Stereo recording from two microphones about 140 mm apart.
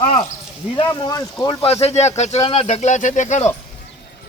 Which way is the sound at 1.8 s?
50° left (ahead or behind).